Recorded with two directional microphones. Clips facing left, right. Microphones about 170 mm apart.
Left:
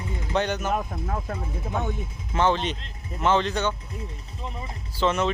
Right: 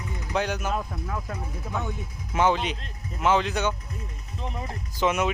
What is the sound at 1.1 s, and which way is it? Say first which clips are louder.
Speech: left 2 dB; 25° left (ahead or behind).